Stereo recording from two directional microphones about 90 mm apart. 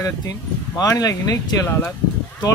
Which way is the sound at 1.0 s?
40° left (ahead or behind).